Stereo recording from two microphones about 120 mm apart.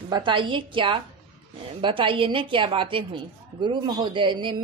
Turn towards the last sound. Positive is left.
turn(degrees=-45)  # may be behind; listen again after turning